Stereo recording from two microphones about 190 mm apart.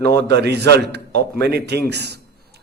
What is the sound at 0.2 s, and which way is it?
A man's voice, 60° right (ahead or behind).